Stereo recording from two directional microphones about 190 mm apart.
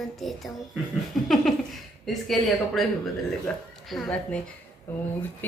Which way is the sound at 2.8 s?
Centre (ahead or behind).